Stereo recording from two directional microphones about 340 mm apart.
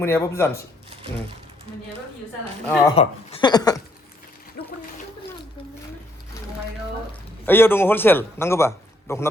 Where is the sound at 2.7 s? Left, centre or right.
Centre.